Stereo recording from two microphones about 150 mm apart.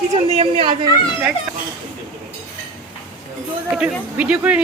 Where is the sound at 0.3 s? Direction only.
45° right (ahead or behind).